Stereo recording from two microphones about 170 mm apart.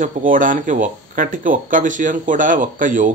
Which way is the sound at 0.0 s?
50° right (ahead or behind).